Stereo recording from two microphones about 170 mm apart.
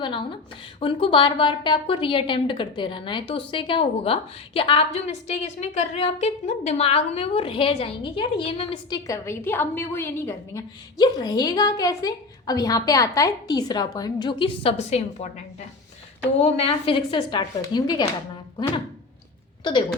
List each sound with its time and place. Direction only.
0.0 s a woman's voice: 30° left (ahead or behind)
8.9 s a woman's voice: 20° left (ahead or behind); by 15.3 s 40° left (ahead or behind)
16.4 s a woman's voice: 35° left (ahead or behind)